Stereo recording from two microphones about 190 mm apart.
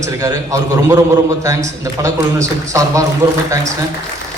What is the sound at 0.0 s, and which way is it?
A man's voice, 15° right (ahead or behind).